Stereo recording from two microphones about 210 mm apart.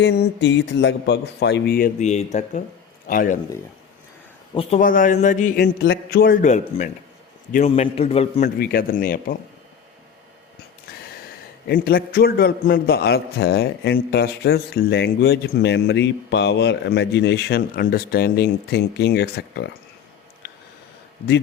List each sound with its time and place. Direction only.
0.0 s a man's voice: 50° left (ahead or behind)
4.8 s a man's voice: 40° left (ahead or behind)
5.5 s a man's voice: 50° left (ahead or behind); by 8.3 s 30° left (ahead or behind)
8.4 s a man's voice: 45° left (ahead or behind)
11.7 s a man's voice: 45° left (ahead or behind)